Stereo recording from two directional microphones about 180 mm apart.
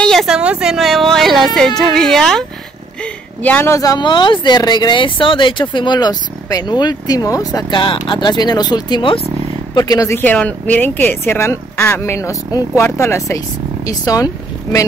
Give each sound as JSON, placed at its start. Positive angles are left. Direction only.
{"t": 0.0, "sound": "a woman's voice", "side_deg": 0}